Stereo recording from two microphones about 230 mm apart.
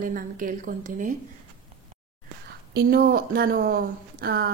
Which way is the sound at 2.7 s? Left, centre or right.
Right.